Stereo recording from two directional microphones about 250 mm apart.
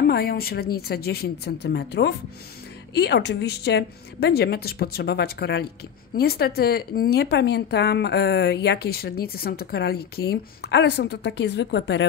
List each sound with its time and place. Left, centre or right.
0.0 s a woman's voice: left